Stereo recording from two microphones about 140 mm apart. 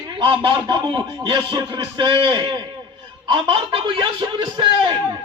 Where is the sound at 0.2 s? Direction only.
35° right (ahead or behind).